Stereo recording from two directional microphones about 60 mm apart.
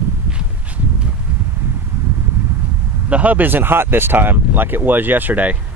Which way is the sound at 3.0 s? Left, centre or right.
Right.